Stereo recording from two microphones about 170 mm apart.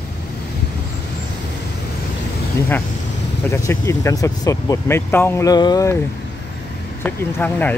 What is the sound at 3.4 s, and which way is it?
Speech, 15° left (ahead or behind).